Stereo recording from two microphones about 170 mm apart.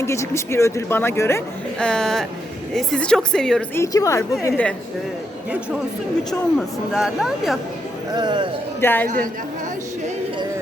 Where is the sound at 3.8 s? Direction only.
20° left (ahead or behind).